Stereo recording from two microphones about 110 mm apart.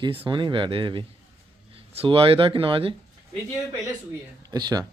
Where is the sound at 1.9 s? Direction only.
60° right (ahead or behind).